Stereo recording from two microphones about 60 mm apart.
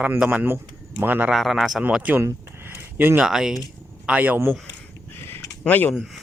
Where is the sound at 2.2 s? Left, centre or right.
Right.